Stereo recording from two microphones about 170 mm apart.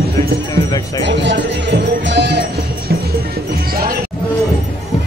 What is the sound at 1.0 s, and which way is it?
Music, 90° right.